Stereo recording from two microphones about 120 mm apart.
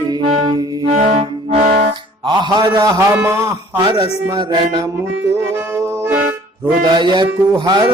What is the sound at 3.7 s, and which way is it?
Music, 40° right (ahead or behind).